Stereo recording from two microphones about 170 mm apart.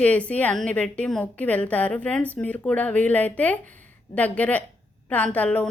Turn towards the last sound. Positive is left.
turn(degrees=10)  # may be behind; listen again after turning